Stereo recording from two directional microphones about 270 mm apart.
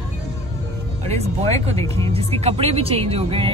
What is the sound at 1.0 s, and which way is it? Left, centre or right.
Speech, right.